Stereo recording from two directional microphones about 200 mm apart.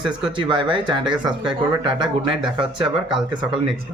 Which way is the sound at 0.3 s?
25° right (ahead or behind).